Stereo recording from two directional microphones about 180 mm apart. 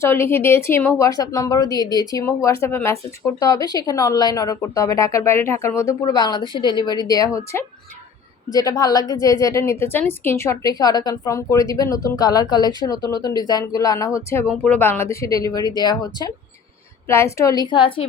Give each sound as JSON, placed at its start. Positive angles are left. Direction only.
{"t": 0.0, "sound": "a woman's voice", "side_deg": 15}